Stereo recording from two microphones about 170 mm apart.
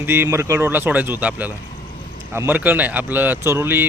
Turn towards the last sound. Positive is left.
turn(degrees=-15)  # may be behind; listen again after turning